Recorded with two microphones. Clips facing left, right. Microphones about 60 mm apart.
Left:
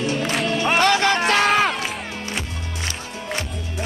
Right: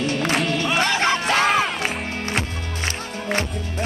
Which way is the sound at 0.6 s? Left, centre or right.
Left.